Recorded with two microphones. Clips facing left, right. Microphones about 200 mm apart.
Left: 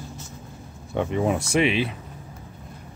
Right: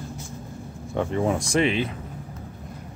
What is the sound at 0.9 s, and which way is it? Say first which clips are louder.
Speech: even; 15° left (ahead or behind).